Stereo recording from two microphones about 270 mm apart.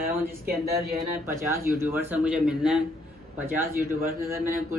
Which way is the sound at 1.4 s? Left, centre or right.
Centre.